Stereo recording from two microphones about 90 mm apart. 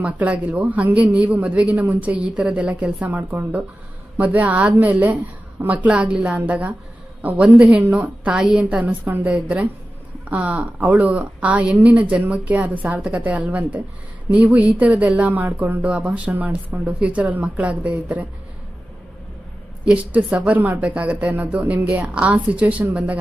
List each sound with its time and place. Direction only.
0.0 s speech: 15° right (ahead or behind)
19.8 s speech: 15° right (ahead or behind)